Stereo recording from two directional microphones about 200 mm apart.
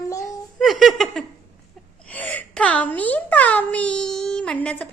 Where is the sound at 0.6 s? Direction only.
Centre (ahead or behind).